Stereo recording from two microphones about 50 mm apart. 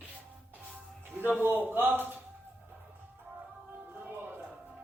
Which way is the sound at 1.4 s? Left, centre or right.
Right.